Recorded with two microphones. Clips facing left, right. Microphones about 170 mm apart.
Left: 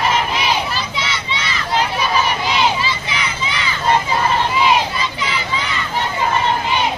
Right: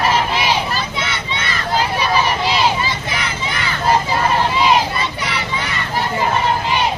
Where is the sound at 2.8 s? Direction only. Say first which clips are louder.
Even; 50° right (ahead or behind).